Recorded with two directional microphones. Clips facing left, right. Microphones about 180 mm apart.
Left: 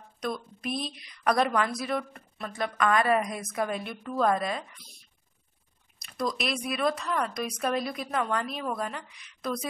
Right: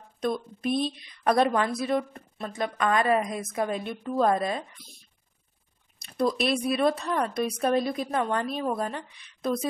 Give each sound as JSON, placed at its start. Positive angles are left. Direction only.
{"t": 0.2, "sound": "speech", "side_deg": -25}
{"t": 6.0, "sound": "speech", "side_deg": -30}